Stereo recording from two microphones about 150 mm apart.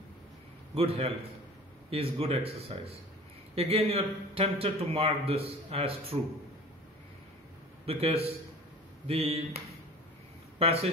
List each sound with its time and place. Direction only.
0.7 s a man's voice: 40° right (ahead or behind)
7.8 s a man's voice: 40° right (ahead or behind)
10.6 s a man's voice: 40° right (ahead or behind)